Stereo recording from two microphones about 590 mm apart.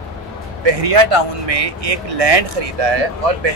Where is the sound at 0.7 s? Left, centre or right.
Right.